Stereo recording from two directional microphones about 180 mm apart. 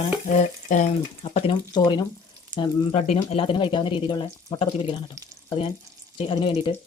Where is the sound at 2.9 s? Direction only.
40° left (ahead or behind).